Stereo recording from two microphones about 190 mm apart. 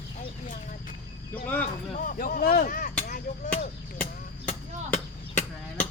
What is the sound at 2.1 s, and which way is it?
Chop, 45° left (ahead or behind).